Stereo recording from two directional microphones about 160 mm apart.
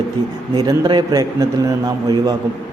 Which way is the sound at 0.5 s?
25° right (ahead or behind).